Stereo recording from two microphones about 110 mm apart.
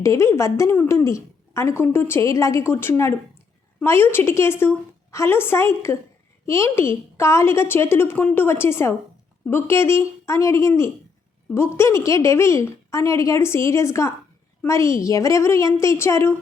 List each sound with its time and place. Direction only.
0.0 s a woman's voice: 25° left (ahead or behind)